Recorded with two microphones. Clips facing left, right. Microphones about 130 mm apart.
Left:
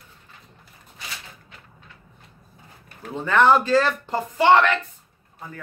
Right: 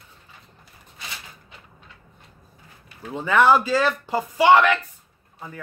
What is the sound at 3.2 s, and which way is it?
Speech, 5° right (ahead or behind).